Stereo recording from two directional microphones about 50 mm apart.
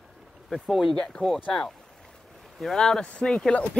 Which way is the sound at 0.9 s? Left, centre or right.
Centre.